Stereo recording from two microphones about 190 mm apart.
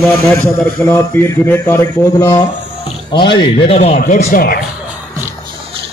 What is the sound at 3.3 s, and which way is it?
Speech, 30° left (ahead or behind).